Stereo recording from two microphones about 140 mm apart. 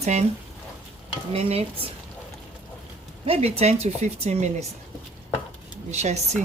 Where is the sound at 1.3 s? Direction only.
45° right (ahead or behind).